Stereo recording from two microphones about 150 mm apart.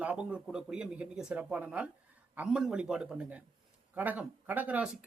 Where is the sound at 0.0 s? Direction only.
10° right (ahead or behind).